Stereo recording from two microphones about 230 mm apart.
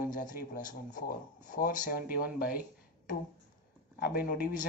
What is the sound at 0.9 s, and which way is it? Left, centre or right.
Speech, left.